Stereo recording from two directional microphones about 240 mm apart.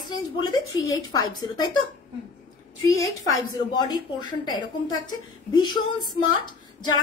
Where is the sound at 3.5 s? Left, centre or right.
Centre.